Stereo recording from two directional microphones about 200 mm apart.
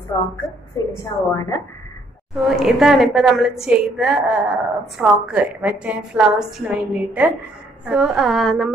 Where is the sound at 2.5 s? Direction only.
Centre (ahead or behind).